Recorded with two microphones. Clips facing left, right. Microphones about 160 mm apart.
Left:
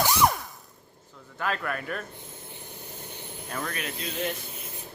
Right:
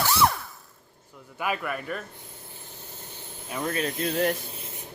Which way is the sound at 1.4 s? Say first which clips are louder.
Right 1 dB; 10° right (ahead or behind).